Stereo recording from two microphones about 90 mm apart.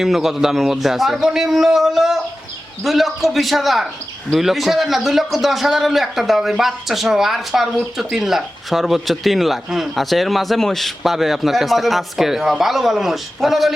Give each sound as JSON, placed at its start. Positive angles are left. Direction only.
{"t": 0.0, "sound": "a man's voice", "side_deg": -5}